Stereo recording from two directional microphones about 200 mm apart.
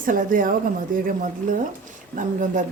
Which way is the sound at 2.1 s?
40° right (ahead or behind).